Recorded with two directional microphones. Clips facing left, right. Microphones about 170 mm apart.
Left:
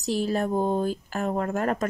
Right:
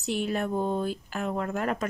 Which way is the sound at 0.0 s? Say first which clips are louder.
Left 3 dB; 35° left (ahead or behind).